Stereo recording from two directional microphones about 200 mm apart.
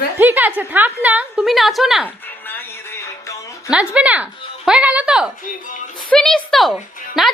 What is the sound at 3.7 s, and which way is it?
A woman's voice, 5° right (ahead or behind).